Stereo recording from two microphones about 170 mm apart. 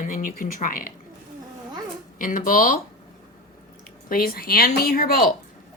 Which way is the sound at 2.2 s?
50° left (ahead or behind).